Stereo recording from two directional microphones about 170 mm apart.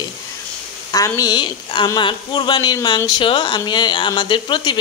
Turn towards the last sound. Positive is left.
turn(degrees=25)  # may be behind; listen again after turning